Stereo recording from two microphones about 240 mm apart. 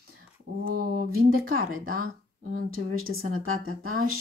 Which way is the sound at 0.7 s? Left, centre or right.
Right.